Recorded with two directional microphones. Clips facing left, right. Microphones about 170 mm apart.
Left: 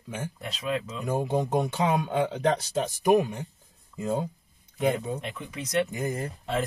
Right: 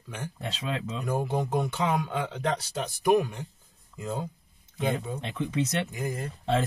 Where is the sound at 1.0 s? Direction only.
20° left (ahead or behind).